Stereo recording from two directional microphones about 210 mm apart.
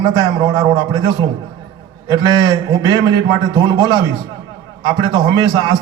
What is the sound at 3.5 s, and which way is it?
A man's voice, 20° right (ahead or behind).